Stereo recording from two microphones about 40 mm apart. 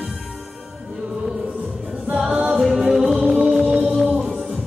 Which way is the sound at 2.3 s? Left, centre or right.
Right.